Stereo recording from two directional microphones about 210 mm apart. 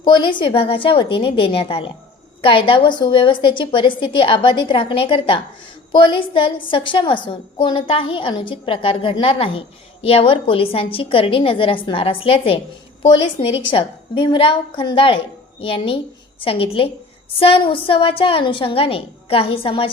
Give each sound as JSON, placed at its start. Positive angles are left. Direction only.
{"t": 0.0, "sound": "a woman's voice", "side_deg": 20}